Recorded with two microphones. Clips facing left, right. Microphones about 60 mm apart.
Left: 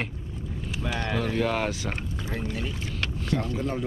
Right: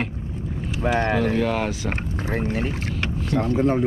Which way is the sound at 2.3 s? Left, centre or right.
Right.